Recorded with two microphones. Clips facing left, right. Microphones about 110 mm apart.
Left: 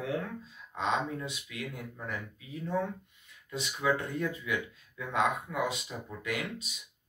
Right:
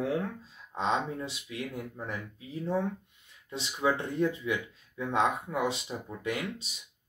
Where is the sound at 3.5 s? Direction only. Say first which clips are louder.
Right 1 dB; 30° right (ahead or behind).